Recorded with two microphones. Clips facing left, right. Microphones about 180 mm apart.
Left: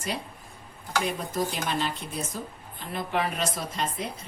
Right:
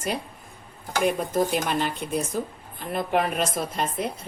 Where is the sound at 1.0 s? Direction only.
55° right (ahead or behind).